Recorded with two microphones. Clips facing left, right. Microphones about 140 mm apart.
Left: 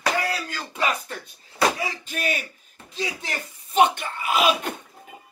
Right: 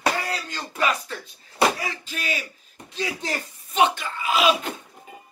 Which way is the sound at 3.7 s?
50° left (ahead or behind).